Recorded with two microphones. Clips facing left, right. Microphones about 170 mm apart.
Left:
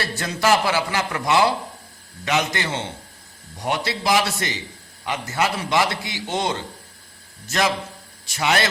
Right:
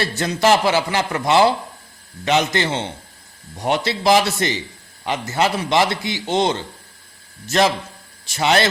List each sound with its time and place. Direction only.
0.2 s a man's voice: 25° right (ahead or behind)